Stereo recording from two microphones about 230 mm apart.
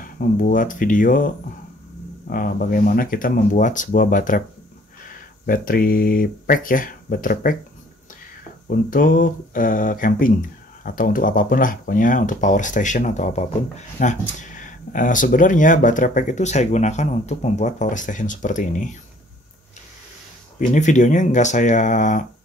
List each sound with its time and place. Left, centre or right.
0.0 s speech: left
5.5 s speech: left
8.6 s speech: left
20.5 s speech: left